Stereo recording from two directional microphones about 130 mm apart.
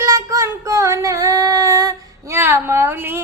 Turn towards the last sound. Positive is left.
turn(degrees=-15)  # may be behind; listen again after turning